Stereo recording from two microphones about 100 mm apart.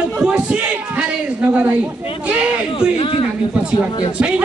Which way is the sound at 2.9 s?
60° left (ahead or behind).